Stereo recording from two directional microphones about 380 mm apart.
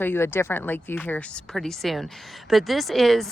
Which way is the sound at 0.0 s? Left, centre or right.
Centre.